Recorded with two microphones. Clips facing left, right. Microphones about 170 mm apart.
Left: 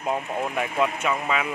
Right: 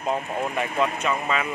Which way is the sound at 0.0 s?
10° left (ahead or behind).